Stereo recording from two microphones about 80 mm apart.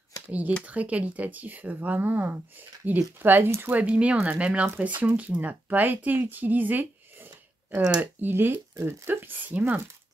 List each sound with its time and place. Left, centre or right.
0.3 s speech: centre
3.7 s speech: centre
6.2 s a sound: right
8.0 s speech: right